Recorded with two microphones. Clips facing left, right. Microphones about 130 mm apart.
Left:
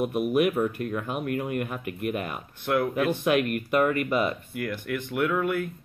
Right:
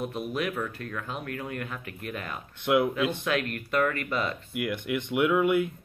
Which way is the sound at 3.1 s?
15° left (ahead or behind).